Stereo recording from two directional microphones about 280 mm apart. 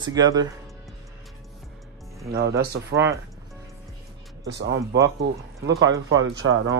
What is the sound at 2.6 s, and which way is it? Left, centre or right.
Speech, right.